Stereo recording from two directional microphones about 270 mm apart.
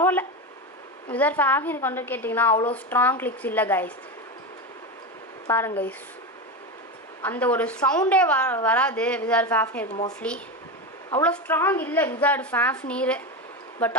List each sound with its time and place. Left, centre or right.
0.0 s a woman's voice: centre
5.5 s a woman's voice: centre
7.2 s a woman's voice: centre
9.8 s speech: left
11.1 s a woman's voice: centre